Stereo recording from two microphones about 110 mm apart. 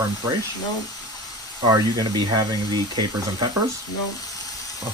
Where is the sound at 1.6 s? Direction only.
40° right (ahead or behind).